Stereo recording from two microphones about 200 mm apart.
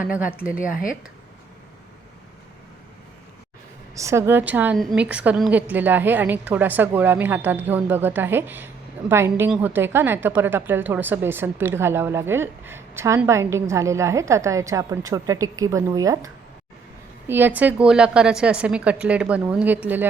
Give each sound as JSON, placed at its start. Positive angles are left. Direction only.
{"t": 0.0, "sound": "a woman's voice", "side_deg": -5}
{"t": 0.5, "sound": "speech", "side_deg": 45}
{"t": 3.9, "sound": "a woman's voice", "side_deg": -15}